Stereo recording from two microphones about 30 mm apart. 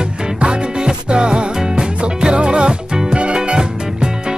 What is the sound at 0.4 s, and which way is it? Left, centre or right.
Music, right.